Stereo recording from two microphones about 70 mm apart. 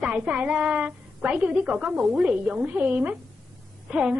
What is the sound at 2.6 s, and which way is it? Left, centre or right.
A woman's voice, right.